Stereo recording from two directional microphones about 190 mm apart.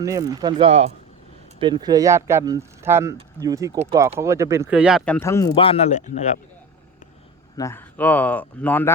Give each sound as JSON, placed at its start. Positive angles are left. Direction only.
{"t": 0.0, "sound": "speech", "side_deg": -15}
{"t": 0.7, "sound": "speech", "side_deg": -35}
{"t": 1.5, "sound": "speech", "side_deg": -25}
{"t": 5.5, "sound": "speech", "side_deg": 30}
{"t": 7.5, "sound": "speech", "side_deg": 15}